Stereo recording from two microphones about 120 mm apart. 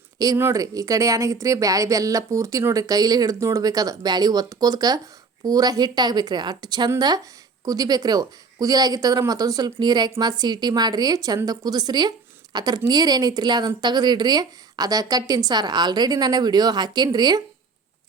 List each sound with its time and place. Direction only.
0.2 s a woman's voice: 25° right (ahead or behind)